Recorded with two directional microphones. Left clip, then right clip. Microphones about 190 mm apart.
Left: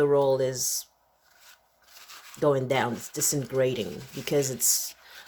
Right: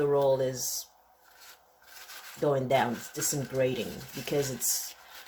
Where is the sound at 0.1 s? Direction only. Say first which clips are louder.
Left 3 dB; 55° left (ahead or behind).